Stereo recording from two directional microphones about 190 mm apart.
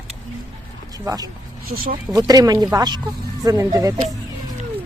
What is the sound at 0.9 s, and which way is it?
Speech, 20° right (ahead or behind).